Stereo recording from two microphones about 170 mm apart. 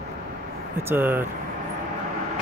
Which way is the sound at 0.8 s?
15° right (ahead or behind).